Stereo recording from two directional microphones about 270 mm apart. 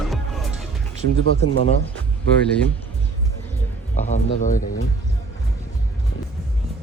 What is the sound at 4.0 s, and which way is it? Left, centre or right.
Speech, left.